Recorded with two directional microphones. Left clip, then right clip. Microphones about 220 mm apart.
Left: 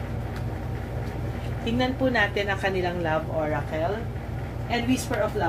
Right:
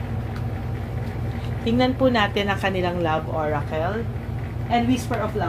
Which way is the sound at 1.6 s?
40° right (ahead or behind).